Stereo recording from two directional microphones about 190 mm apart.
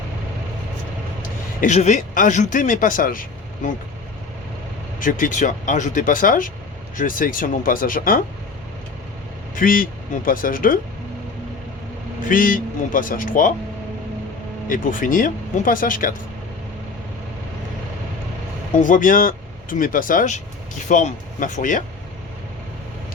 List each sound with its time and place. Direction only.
1.6 s speech: 40° left (ahead or behind)
4.9 s speech: 45° left (ahead or behind)
9.6 s speech: 45° left (ahead or behind)
12.3 s speech: 45° left (ahead or behind)
14.7 s speech: 45° left (ahead or behind)
18.8 s speech: 45° left (ahead or behind)